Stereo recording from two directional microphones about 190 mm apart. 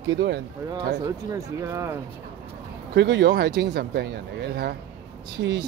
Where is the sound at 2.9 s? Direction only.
60° right (ahead or behind).